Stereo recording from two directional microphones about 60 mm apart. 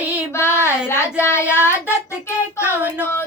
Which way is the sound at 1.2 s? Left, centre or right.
Left.